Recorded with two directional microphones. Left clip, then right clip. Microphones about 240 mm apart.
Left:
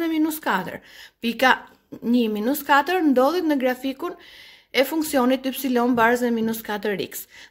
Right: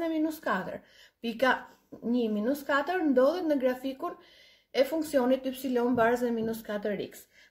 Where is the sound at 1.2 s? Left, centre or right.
Left.